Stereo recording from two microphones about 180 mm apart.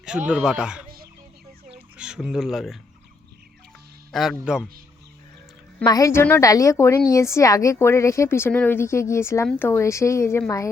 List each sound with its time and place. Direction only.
0.3 s speech: 5° right (ahead or behind)
2.0 s speech: 5° right (ahead or behind)
4.1 s speech: centre (ahead or behind)
5.8 s a woman's voice: 20° left (ahead or behind)